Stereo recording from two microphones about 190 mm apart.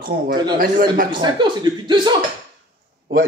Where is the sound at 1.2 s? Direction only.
25° right (ahead or behind).